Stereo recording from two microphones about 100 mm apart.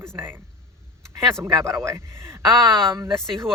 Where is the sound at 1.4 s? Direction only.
30° right (ahead or behind).